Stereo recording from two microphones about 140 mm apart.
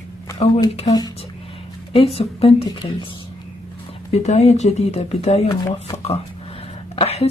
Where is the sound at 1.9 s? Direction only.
45° left (ahead or behind).